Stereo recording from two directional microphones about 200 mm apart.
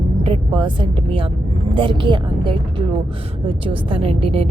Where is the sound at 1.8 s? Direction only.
25° right (ahead or behind).